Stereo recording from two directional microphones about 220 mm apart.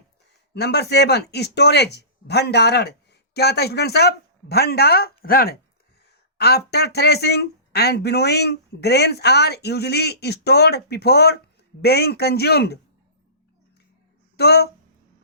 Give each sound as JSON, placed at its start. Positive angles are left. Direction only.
{"t": 0.5, "sound": "speech", "side_deg": 50}
{"t": 14.3, "sound": "speech", "side_deg": 45}